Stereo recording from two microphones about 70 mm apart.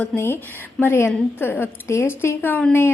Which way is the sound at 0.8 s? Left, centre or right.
Left.